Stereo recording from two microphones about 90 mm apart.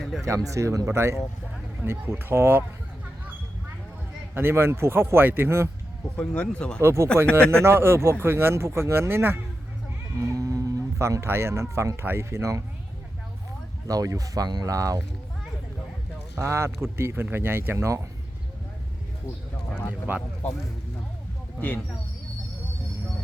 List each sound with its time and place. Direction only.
0.0 s a sound: 5° left (ahead or behind)
0.3 s speech: 35° right (ahead or behind)
4.4 s speech: 25° right (ahead or behind)
6.1 s speech: 15° left (ahead or behind)
6.8 s speech: 30° right (ahead or behind)
10.2 s speech: 40° right (ahead or behind)
13.8 s speech: 40° right (ahead or behind)
16.4 s speech: 30° right (ahead or behind)
19.9 s speech: 15° right (ahead or behind)